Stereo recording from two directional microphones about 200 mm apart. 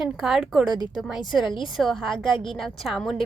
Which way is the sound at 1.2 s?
20° left (ahead or behind).